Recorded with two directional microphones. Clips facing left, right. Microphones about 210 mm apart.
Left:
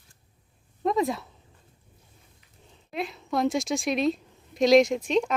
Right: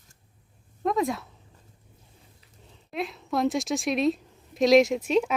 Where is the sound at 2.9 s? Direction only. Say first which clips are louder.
Even; centre (ahead or behind).